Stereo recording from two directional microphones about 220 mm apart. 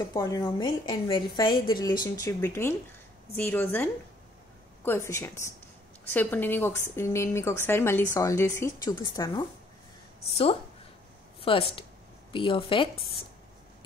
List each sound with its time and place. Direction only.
0.1 s a woman's voice: 15° left (ahead or behind)
11.4 s a woman's voice: 25° left (ahead or behind)